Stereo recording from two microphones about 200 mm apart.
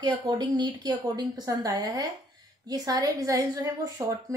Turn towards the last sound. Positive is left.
turn(degrees=-15)  # may be behind; listen again after turning